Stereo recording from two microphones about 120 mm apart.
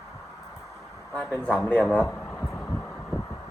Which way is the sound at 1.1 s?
15° left (ahead or behind).